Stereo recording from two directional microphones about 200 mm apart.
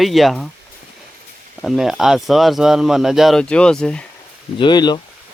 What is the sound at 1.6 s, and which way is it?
Speech, centre (ahead or behind).